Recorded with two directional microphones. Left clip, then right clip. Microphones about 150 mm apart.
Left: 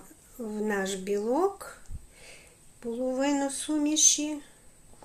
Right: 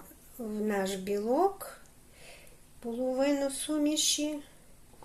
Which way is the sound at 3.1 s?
25° left (ahead or behind).